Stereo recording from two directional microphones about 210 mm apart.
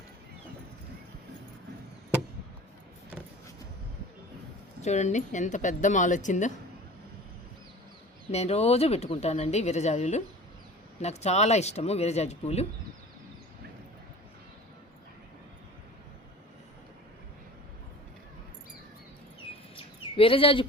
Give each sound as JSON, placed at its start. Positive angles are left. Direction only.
{"t": 4.8, "sound": "speech", "side_deg": 35}
{"t": 8.3, "sound": "speech", "side_deg": 30}
{"t": 19.7, "sound": "a sound", "side_deg": 25}